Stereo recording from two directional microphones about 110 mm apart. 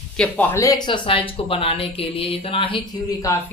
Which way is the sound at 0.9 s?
55° left (ahead or behind).